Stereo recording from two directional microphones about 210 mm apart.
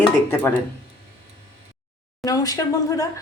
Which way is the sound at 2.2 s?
15° left (ahead or behind).